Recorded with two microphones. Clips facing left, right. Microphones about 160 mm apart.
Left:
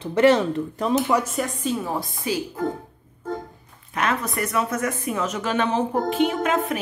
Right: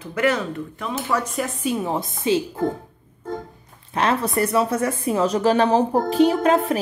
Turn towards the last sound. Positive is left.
turn(degrees=-35)  # may be behind; listen again after turning